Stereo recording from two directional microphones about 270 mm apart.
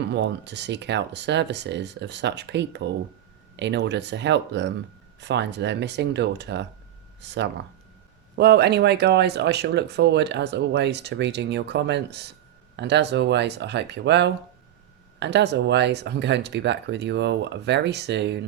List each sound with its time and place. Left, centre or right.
0.0 s speech: right